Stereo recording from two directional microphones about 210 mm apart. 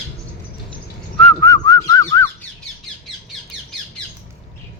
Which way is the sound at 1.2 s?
5° left (ahead or behind).